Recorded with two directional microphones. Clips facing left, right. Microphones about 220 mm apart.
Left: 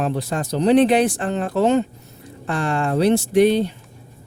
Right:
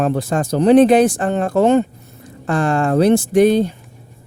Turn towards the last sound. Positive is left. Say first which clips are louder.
# right 3 dB
turn(degrees=-45)  # may be behind; listen again after turning